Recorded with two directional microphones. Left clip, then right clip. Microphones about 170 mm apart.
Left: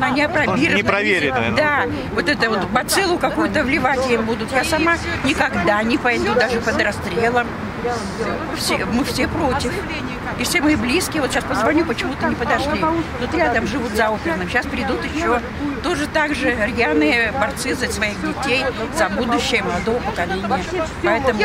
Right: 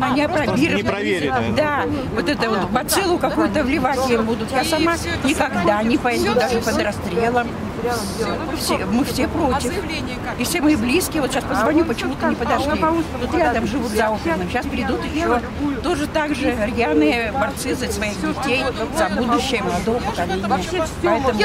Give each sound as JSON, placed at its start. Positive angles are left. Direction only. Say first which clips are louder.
{"t": 0.0, "sound": "speech", "louder": "left 1 dB", "side_deg": 0}
{"t": 0.7, "sound": "speech", "louder": "left 4 dB", "side_deg": 20}
{"t": 1.5, "sound": "speech", "louder": "left 2 dB", "side_deg": 0}
{"t": 8.6, "sound": "speech", "louder": "left 1 dB", "side_deg": 0}
{"t": 10.5, "sound": "speech", "louder": "left 1 dB", "side_deg": 5}